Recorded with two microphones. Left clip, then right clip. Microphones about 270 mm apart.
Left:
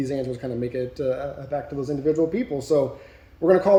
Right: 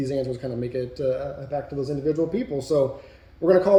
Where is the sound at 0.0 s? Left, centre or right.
Centre.